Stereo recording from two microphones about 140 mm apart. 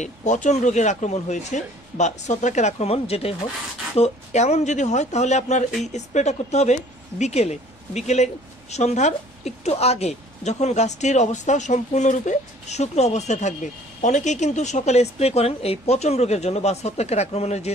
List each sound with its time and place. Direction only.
0.0 s a woman's voice: 60° left (ahead or behind)